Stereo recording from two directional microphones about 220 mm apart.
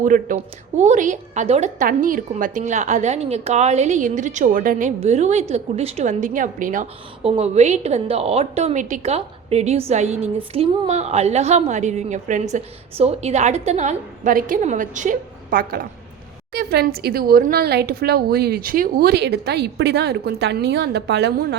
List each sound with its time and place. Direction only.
0.0 s a woman's voice: 35° right (ahead or behind)